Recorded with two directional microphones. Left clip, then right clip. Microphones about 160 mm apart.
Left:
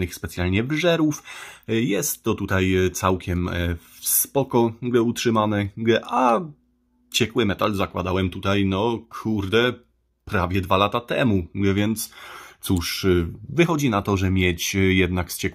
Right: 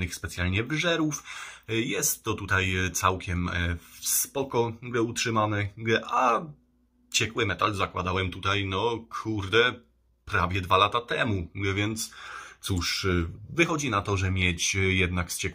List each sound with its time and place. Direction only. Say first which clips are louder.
0.0 s speech: left 4 dB; 55° left (ahead or behind)